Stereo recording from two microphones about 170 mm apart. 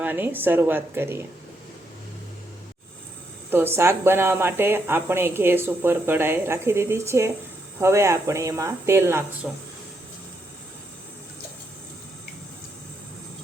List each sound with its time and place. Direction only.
0.0 s speech: 10° right (ahead or behind)
3.5 s speech: 15° right (ahead or behind)